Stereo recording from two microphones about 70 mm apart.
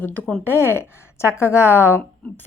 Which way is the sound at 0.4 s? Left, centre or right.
Left.